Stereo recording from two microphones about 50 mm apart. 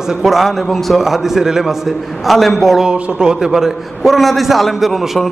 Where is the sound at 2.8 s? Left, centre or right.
Centre.